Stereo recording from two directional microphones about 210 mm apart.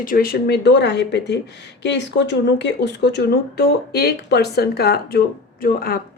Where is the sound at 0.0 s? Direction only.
40° left (ahead or behind).